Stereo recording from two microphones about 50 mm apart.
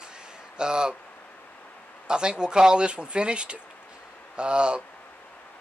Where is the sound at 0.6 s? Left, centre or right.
Centre.